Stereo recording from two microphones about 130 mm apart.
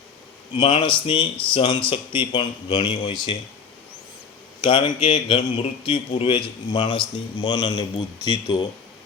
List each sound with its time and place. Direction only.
0.5 s a man's voice: 40° left (ahead or behind)
4.6 s a man's voice: 40° left (ahead or behind)